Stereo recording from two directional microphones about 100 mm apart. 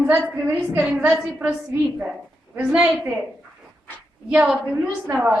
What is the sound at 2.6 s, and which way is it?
Speech, 10° right (ahead or behind).